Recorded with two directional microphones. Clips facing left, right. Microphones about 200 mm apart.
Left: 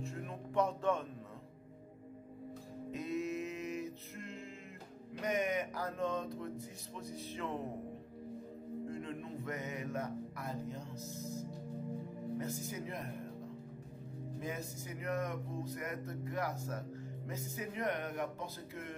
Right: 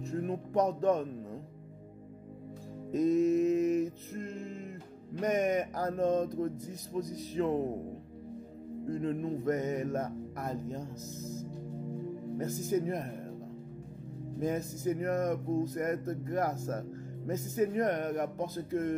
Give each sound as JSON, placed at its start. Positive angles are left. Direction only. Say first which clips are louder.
{"t": 0.0, "sound": "speech", "louder": "right 9 dB", "side_deg": -40}
{"t": 2.9, "sound": "music", "louder": "right 12 dB", "side_deg": -45}
{"t": 5.2, "sound": "speech", "louder": "right 6 dB", "side_deg": -45}
{"t": 8.8, "sound": "speech", "louder": "right 13 dB", "side_deg": -40}
{"t": 12.4, "sound": "speech", "louder": "right 12 dB", "side_deg": -45}
{"t": 14.4, "sound": "speech", "louder": "right 12 dB", "side_deg": -45}